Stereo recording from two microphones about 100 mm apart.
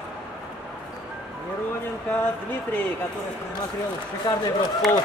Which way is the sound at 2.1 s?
15° left (ahead or behind).